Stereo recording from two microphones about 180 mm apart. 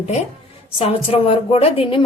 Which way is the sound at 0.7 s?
30° left (ahead or behind).